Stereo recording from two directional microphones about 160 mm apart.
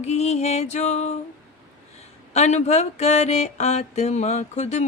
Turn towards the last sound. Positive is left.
turn(degrees=45)  # may be behind; listen again after turning